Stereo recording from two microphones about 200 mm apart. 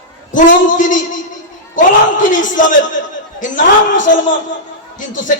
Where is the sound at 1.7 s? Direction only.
40° left (ahead or behind).